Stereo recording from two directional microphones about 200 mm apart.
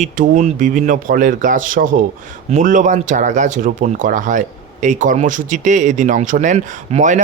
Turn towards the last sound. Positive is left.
turn(degrees=-35)  # may be behind; listen again after turning